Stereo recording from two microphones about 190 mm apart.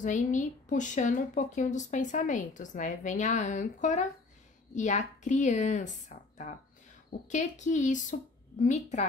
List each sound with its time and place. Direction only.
0.0 s a woman's voice: 40° left (ahead or behind)